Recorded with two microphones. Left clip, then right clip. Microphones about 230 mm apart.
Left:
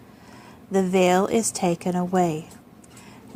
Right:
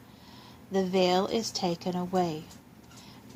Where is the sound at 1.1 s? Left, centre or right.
Left.